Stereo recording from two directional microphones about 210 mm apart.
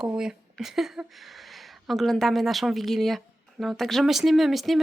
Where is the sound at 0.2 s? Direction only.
Centre (ahead or behind).